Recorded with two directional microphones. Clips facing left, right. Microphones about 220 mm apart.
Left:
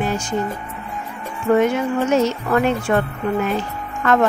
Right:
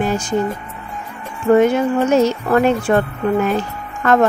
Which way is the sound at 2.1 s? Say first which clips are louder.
Right 2 dB; 40° right (ahead or behind).